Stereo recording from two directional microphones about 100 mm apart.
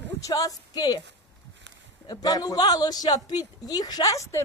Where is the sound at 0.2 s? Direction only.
35° left (ahead or behind).